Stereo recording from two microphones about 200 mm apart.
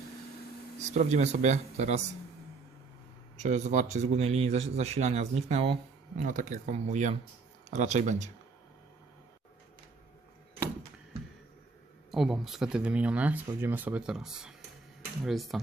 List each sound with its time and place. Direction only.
0.8 s speech: 35° right (ahead or behind)
3.3 s speech: 35° right (ahead or behind)
12.1 s speech: centre (ahead or behind)